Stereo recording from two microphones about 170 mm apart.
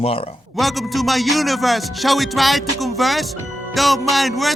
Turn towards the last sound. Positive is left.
turn(degrees=0)  # may be behind; listen again after turning